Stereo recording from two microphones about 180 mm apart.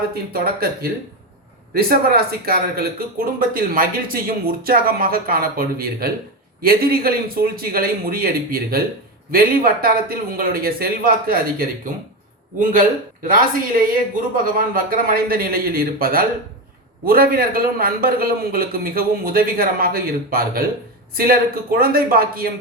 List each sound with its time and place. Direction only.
0.1 s speech: 60° right (ahead or behind)
12.5 s speech: 50° right (ahead or behind)